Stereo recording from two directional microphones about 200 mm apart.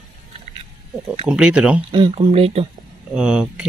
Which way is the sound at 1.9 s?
25° right (ahead or behind).